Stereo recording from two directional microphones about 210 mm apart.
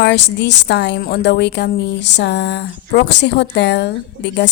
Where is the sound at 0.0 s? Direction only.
55° left (ahead or behind).